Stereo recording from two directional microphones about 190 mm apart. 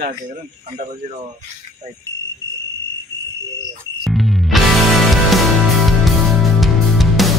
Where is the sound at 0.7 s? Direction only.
30° right (ahead or behind).